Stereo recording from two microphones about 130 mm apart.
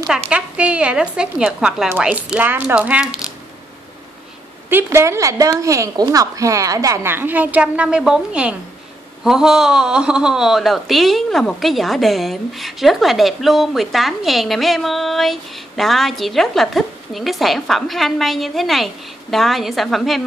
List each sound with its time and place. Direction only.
0.3 s speech: 10° right (ahead or behind)
4.6 s a woman's voice: 20° right (ahead or behind); by 20.2 s centre (ahead or behind)